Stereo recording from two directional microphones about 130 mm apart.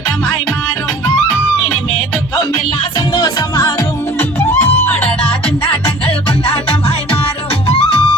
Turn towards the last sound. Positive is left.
turn(degrees=50)  # may be behind; listen again after turning